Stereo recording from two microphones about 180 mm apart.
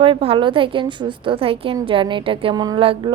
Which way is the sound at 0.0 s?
30° right (ahead or behind).